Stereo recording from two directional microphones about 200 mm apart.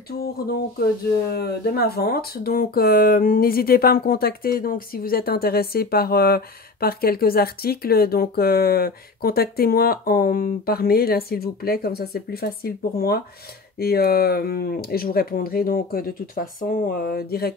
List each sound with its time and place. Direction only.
0.2 s speech: 50° left (ahead or behind)